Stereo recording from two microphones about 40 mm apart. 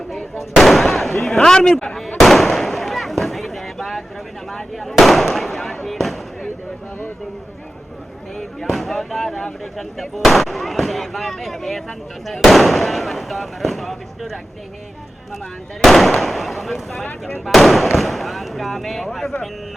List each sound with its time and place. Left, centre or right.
0.3 s firecracker: centre
1.2 s speech: centre
2.1 s a sound: centre
4.5 s speech: centre
8.4 s speech: centre
15.8 s speech: centre
17.1 s speech: left
17.4 s speech: centre